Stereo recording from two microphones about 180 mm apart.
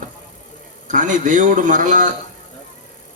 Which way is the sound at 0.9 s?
45° right (ahead or behind).